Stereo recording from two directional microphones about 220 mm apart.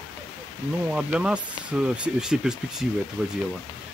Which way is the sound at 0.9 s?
5° right (ahead or behind).